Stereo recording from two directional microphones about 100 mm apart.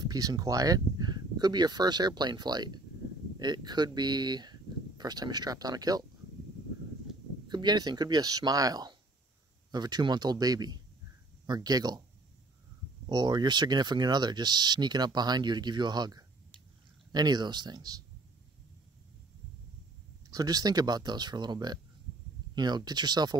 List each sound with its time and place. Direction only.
0.0 s speech: 40° right (ahead or behind)
7.4 s speech: 45° right (ahead or behind)
13.0 s speech: 45° right (ahead or behind)
20.2 s speech: 40° right (ahead or behind)